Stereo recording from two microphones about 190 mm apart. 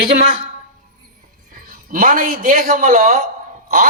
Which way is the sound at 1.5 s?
45° right (ahead or behind).